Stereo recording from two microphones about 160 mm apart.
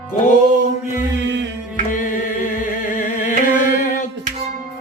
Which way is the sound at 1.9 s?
55° left (ahead or behind).